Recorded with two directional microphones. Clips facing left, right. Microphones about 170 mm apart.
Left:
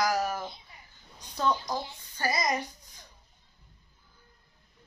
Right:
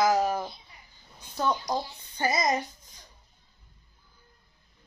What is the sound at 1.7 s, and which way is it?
A child's voice, 20° right (ahead or behind).